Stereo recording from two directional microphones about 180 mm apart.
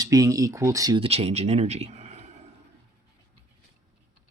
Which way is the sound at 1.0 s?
35° right (ahead or behind).